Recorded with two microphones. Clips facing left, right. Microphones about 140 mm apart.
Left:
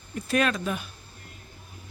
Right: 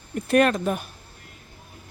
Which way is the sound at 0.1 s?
55° right (ahead or behind).